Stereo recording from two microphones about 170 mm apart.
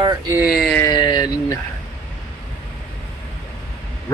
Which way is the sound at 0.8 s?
25° left (ahead or behind).